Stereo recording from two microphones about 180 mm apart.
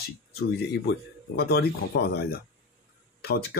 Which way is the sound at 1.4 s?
60° left (ahead or behind).